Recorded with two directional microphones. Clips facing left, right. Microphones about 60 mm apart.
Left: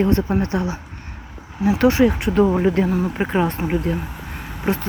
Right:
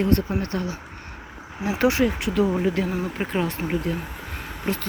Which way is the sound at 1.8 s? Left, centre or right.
Centre.